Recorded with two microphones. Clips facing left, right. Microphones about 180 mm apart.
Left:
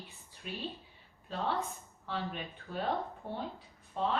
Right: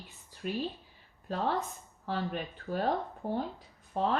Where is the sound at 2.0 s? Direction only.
45° right (ahead or behind).